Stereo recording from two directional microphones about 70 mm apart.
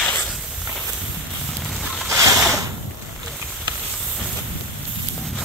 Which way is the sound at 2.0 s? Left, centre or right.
Right.